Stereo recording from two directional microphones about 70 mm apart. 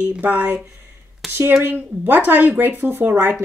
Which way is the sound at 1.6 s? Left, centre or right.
Right.